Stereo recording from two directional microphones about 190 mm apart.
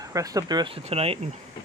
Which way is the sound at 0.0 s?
20° right (ahead or behind).